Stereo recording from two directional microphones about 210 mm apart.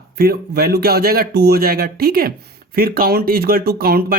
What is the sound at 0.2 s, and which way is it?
Speech, 45° right (ahead or behind).